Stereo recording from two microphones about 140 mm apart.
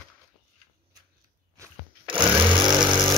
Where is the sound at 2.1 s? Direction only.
5° right (ahead or behind).